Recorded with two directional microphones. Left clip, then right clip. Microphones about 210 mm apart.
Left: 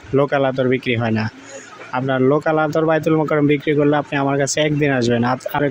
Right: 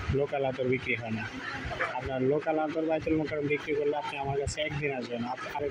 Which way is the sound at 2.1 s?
55° left (ahead or behind).